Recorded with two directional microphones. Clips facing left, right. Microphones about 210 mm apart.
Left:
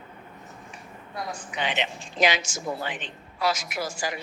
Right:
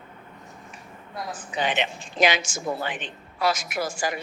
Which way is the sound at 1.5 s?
50° right (ahead or behind).